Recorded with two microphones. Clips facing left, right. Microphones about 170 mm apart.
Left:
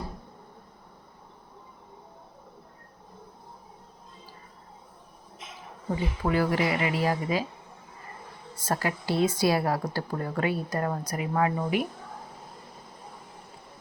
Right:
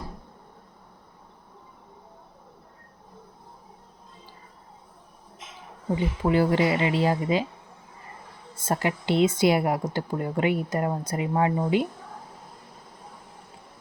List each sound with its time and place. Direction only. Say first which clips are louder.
6.2 s speech: right 4 dB; 25° right (ahead or behind)
8.6 s speech: right 3 dB; 20° right (ahead or behind)